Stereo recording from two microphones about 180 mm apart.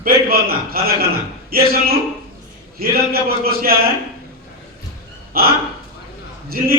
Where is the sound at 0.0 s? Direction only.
55° right (ahead or behind).